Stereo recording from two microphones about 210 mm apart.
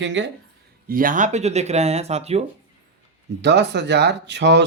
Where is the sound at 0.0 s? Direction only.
60° right (ahead or behind).